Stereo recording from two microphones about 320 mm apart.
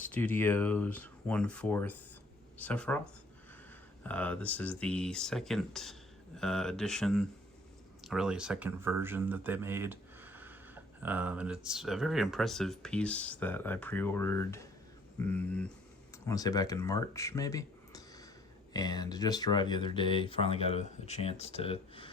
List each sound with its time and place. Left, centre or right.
0.0 s speech: centre
4.0 s speech: centre